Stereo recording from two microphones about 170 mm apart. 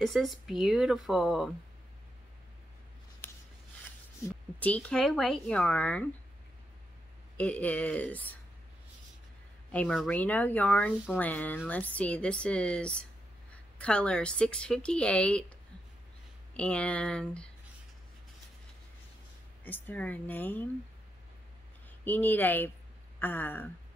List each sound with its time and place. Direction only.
0.0 s speech: centre (ahead or behind)
4.6 s a woman's voice: 10° left (ahead or behind)
7.3 s a woman's voice: 10° left (ahead or behind)
9.7 s a woman's voice: 5° left (ahead or behind)
16.5 s a woman's voice: 5° left (ahead or behind)
19.6 s a woman's voice: 10° left (ahead or behind)
22.0 s a woman's voice: 10° left (ahead or behind)